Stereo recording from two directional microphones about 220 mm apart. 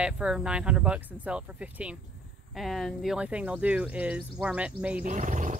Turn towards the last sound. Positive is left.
turn(degrees=-35)  # may be behind; listen again after turning